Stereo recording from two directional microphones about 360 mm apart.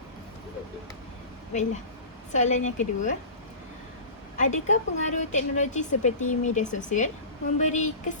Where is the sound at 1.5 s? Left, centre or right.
Centre.